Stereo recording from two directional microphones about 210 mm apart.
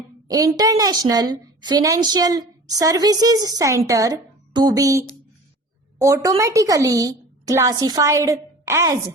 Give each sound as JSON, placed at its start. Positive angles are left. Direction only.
{"t": 0.3, "sound": "a woman's voice", "side_deg": -15}